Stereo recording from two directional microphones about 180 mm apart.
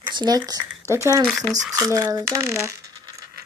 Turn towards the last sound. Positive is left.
turn(degrees=-20)  # may be behind; listen again after turning